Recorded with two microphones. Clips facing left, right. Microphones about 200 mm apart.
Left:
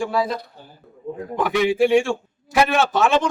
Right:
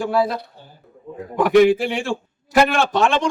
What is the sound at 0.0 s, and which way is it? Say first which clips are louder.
Speech: right 2 dB; centre (ahead or behind).